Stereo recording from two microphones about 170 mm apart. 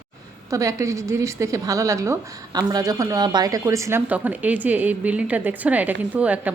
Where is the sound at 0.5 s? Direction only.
20° right (ahead or behind).